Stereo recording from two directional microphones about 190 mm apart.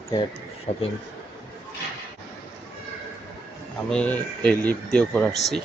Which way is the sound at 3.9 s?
5° left (ahead or behind).